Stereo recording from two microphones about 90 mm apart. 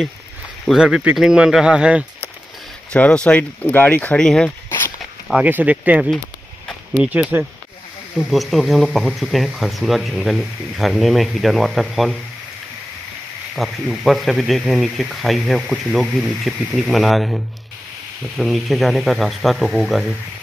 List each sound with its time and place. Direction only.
0.7 s speech: 5° right (ahead or behind)
2.9 s speech: 15° left (ahead or behind)
4.2 s speech: 10° left (ahead or behind)
4.6 s walk: 25° left (ahead or behind)
5.4 s speech: 20° right (ahead or behind)
8.3 s speech: centre (ahead or behind)
13.6 s speech: centre (ahead or behind)
18.4 s speech: centre (ahead or behind)